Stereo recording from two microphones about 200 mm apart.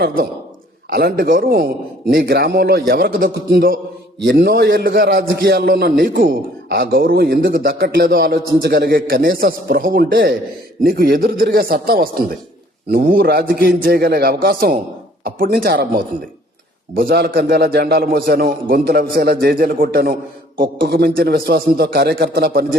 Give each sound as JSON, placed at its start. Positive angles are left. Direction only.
{"t": 0.0, "sound": "a man's voice", "side_deg": -45}